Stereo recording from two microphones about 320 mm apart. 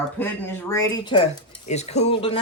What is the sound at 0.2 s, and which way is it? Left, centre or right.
Speech, centre.